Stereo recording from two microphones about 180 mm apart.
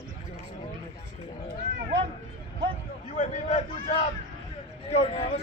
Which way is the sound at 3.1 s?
40° left (ahead or behind).